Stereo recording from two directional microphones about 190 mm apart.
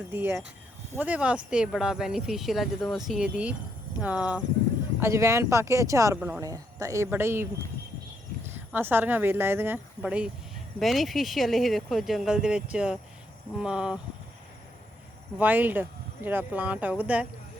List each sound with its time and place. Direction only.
0.1 s speech: 10° right (ahead or behind)
8.4 s speech: 10° right (ahead or behind)
15.4 s speech: 10° right (ahead or behind)